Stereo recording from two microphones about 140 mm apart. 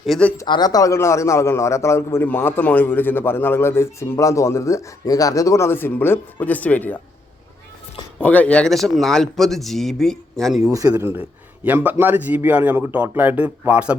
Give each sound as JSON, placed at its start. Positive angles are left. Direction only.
{"t": 0.0, "sound": "speech", "side_deg": 5}
{"t": 0.4, "sound": "a man's voice", "side_deg": 30}
{"t": 8.2, "sound": "speech", "side_deg": 10}
{"t": 10.7, "sound": "a man's voice", "side_deg": -25}
{"t": 10.9, "sound": "a man's voice", "side_deg": -15}